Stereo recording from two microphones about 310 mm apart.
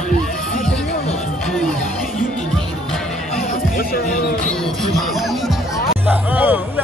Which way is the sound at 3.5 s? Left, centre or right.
Left.